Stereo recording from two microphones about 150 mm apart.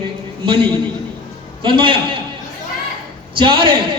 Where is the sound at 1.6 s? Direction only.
35° right (ahead or behind).